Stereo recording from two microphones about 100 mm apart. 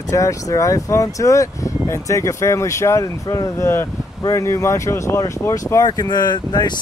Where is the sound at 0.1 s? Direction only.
30° left (ahead or behind).